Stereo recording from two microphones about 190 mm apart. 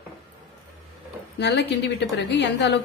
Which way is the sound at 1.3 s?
65° left (ahead or behind).